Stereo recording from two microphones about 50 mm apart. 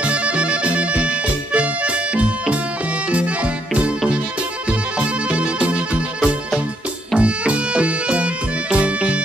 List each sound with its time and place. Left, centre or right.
0.0 s music: right